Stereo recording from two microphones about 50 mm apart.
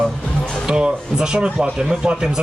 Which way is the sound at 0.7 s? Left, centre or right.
Centre.